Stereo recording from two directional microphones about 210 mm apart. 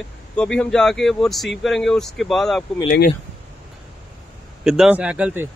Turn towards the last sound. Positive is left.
turn(degrees=-5)  # may be behind; listen again after turning